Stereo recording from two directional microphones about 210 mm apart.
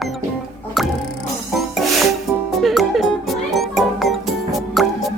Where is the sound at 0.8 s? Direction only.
Centre (ahead or behind).